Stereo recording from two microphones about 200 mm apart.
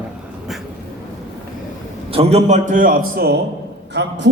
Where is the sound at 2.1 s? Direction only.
30° right (ahead or behind); by 4.3 s 60° right (ahead or behind).